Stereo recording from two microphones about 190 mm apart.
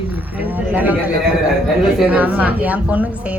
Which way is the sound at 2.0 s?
10° right (ahead or behind).